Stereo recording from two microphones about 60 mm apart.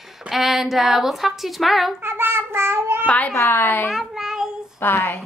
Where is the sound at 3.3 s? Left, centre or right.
Left.